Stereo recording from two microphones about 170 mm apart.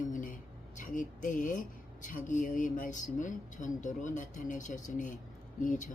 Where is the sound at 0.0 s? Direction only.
50° left (ahead or behind).